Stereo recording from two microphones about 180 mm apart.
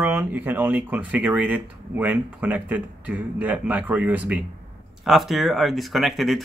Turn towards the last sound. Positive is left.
turn(degrees=0)  # may be behind; listen again after turning